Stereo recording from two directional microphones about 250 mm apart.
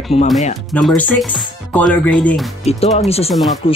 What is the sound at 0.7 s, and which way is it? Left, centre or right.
Speech, centre.